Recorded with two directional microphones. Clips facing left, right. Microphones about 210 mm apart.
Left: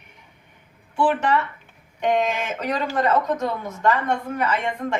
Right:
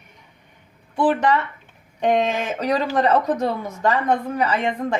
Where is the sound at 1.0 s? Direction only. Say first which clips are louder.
Right 2 dB; 35° right (ahead or behind).